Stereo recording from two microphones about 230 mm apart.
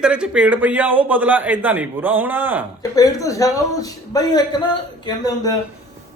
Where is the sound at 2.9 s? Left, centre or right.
Centre.